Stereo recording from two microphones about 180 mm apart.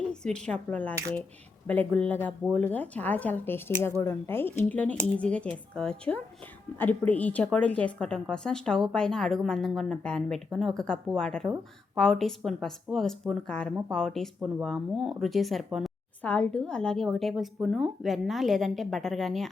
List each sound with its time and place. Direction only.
0.1 s a woman's voice: 5° left (ahead or behind)